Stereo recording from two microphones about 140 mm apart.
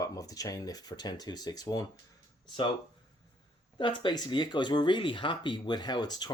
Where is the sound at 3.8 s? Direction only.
35° left (ahead or behind).